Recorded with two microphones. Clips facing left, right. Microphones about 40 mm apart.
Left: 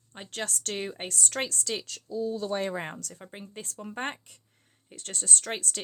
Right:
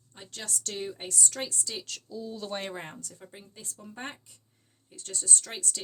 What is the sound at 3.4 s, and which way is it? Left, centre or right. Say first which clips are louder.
Speech: left 6 dB; left.